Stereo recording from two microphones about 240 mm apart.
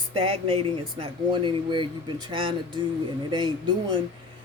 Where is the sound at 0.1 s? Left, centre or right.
Right.